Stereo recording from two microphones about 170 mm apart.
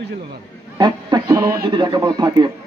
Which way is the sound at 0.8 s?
25° right (ahead or behind).